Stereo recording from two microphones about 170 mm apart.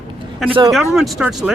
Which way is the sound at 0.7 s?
Centre (ahead or behind).